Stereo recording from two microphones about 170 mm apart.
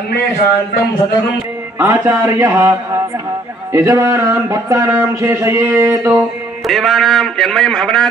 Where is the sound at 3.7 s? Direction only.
20° right (ahead or behind).